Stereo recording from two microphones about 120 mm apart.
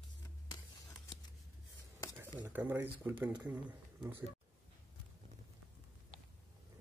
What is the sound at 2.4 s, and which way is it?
Speech, 15° right (ahead or behind).